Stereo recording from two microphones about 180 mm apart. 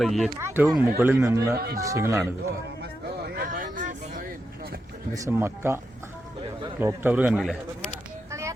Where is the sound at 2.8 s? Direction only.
65° right (ahead or behind); by 4.2 s 45° right (ahead or behind).